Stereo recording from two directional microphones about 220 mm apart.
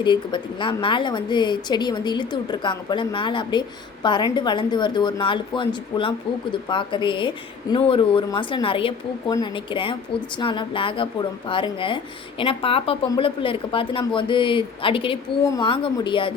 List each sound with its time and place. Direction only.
0.0 s speech: 20° left (ahead or behind)